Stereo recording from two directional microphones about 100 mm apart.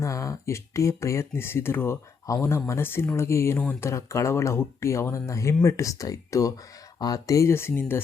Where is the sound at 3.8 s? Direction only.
30° left (ahead or behind).